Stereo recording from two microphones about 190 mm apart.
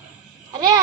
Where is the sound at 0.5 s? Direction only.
20° right (ahead or behind).